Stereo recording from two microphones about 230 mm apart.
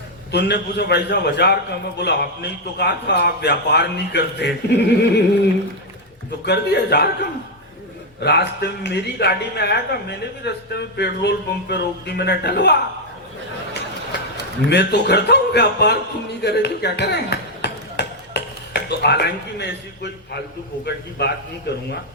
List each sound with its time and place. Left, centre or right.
0.3 s speech: left
6.4 s speech: left
8.2 s speech: left
14.7 s speech: left
16.4 s a sound: left
21.2 s speech: left